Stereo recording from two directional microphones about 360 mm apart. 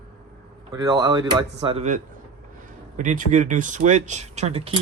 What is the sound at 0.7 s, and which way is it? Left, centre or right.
Speech, centre.